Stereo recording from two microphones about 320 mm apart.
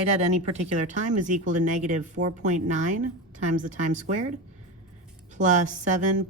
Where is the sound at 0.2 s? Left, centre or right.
Right.